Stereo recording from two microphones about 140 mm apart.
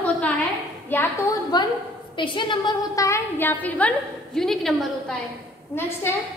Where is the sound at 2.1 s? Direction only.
35° left (ahead or behind); by 5.2 s 5° left (ahead or behind).